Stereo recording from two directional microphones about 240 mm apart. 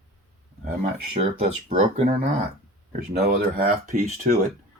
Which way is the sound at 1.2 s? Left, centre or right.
Right.